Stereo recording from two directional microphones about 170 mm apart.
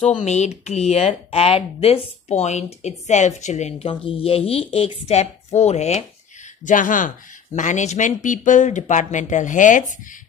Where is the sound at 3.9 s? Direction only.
30° left (ahead or behind).